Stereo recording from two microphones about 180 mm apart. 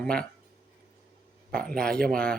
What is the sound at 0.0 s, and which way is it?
Speech, 5° left (ahead or behind).